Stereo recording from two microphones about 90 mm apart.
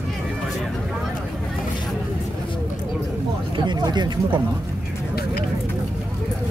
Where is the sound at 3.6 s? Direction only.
55° right (ahead or behind).